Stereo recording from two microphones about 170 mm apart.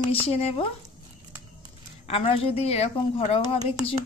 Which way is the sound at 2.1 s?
35° left (ahead or behind).